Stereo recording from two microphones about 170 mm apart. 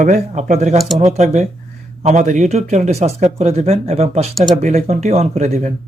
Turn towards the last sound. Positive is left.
turn(degrees=-40)  # may be behind; listen again after turning